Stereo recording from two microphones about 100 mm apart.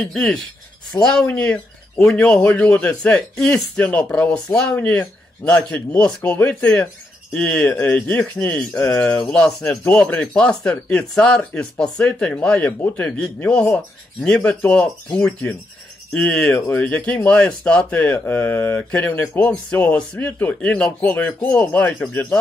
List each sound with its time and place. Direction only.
0.0 s speech: 10° left (ahead or behind)